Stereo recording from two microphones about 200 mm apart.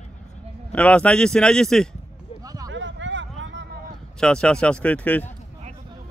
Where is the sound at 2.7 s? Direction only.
65° right (ahead or behind).